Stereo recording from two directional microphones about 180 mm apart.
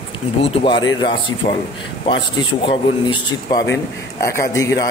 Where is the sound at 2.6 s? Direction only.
25° left (ahead or behind).